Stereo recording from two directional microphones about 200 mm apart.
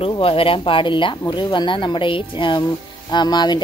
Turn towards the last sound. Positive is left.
turn(degrees=20)  # may be behind; listen again after turning